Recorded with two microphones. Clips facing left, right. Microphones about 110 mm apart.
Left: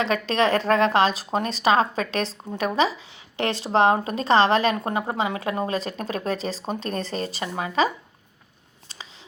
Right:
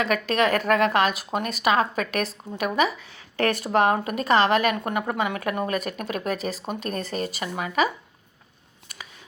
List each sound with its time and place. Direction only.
0.0 s a woman's voice: 30° left (ahead or behind)
3.3 s a woman's voice: 20° left (ahead or behind)